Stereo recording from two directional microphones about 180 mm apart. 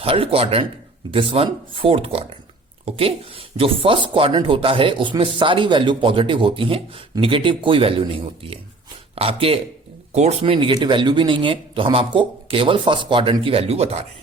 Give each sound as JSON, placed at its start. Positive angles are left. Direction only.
{"t": 0.0, "sound": "a man's voice", "side_deg": -30}